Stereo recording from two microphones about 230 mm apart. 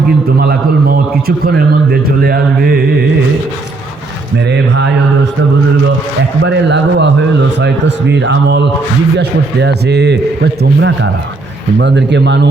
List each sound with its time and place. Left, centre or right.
0.3 s a man's voice: right
4.4 s a man's voice: right
6.4 s a man's voice: right